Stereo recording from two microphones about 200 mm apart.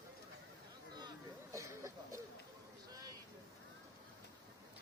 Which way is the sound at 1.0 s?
20° right (ahead or behind).